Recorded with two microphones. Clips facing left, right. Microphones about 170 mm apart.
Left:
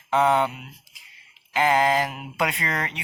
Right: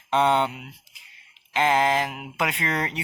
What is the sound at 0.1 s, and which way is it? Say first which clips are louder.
Speech: left 1 dB; centre (ahead or behind).